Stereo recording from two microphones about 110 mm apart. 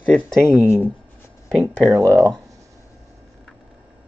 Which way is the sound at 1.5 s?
5° left (ahead or behind).